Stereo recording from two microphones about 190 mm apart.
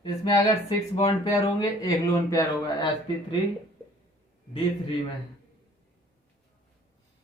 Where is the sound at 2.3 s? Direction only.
20° left (ahead or behind).